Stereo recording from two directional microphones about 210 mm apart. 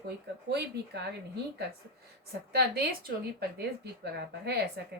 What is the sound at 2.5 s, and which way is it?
Speech, 45° right (ahead or behind).